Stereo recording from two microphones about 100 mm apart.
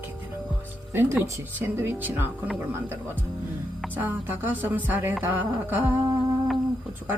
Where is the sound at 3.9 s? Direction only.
20° right (ahead or behind).